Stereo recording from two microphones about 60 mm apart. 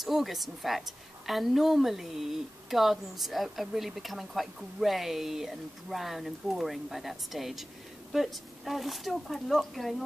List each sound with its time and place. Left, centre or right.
0.0 s a woman's voice: centre